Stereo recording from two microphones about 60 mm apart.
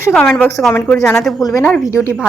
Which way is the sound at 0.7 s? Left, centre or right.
Left.